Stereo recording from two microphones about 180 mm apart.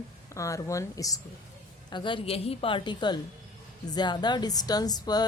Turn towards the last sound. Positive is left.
turn(degrees=20)  # may be behind; listen again after turning